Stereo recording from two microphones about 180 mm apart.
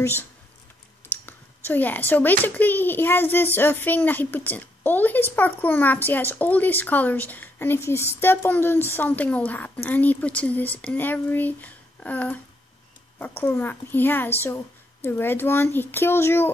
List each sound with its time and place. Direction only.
0.0 s a child's voice: 10° left (ahead or behind)
13.4 s a child's voice: 10° left (ahead or behind)